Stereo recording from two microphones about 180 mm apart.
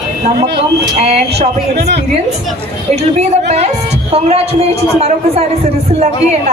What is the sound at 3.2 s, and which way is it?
A woman's voice, 35° right (ahead or behind).